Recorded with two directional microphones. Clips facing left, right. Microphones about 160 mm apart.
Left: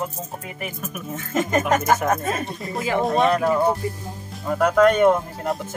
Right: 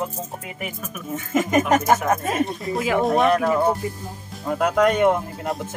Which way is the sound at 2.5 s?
Centre (ahead or behind).